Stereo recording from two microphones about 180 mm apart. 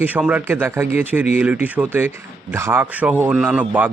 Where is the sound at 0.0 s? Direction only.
10° right (ahead or behind).